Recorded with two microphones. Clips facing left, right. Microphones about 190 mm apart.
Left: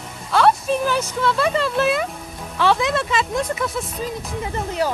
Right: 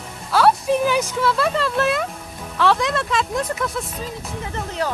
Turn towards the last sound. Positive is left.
turn(degrees=10)  # may be behind; listen again after turning